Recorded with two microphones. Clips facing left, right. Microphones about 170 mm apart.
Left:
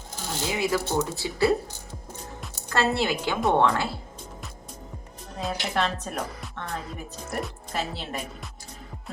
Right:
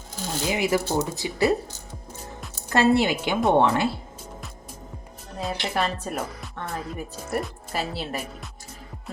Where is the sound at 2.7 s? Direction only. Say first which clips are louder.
Right 5 dB; 15° right (ahead or behind).